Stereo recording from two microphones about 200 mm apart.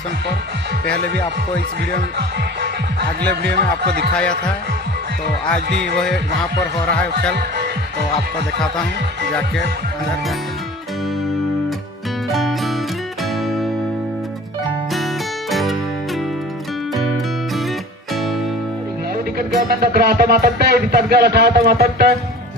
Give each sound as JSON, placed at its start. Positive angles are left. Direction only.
{"t": 0.9, "sound": "speech", "side_deg": -50}
{"t": 4.1, "sound": "speech", "side_deg": 5}
{"t": 5.7, "sound": "speech", "side_deg": -55}
{"t": 7.3, "sound": "speech", "side_deg": -55}
{"t": 12.3, "sound": "music", "side_deg": 0}
{"t": 15.5, "sound": "music", "side_deg": 0}
{"t": 18.1, "sound": "music", "side_deg": 0}
{"t": 19.3, "sound": "music", "side_deg": -50}